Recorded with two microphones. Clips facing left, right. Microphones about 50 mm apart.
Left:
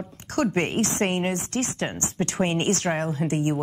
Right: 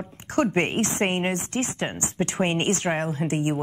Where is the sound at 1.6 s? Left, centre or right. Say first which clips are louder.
Even; centre.